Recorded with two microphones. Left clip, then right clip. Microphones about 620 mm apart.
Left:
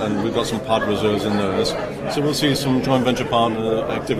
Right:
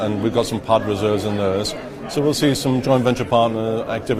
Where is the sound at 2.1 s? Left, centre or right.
Right.